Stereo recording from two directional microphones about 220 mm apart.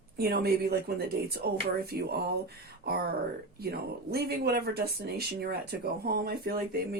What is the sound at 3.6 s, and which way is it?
Speech, 45° right (ahead or behind).